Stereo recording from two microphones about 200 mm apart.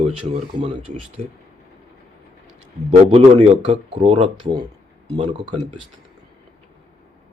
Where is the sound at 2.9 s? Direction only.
30° right (ahead or behind).